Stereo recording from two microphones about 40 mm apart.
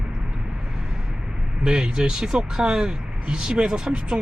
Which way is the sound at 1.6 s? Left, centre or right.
Right.